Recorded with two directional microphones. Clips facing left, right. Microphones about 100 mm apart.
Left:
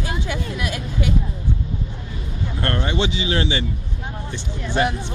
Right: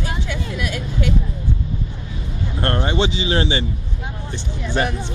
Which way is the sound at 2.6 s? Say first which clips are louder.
Right 3 dB; 25° right (ahead or behind).